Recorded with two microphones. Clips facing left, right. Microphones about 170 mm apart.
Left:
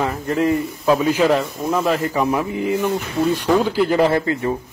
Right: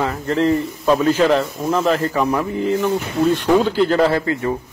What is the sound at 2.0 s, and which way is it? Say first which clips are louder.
Speech: right 1 dB; 15° left (ahead or behind).